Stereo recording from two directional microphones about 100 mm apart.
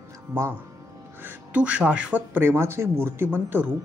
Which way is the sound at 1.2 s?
15° right (ahead or behind).